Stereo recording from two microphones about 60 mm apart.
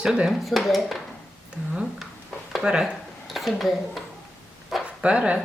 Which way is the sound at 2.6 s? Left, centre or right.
Centre.